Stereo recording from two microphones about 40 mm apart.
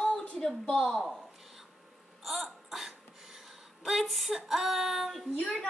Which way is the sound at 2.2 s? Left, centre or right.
Centre.